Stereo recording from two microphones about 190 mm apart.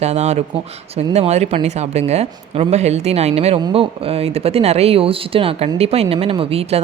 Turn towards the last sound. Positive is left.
turn(degrees=-30)  # may be behind; listen again after turning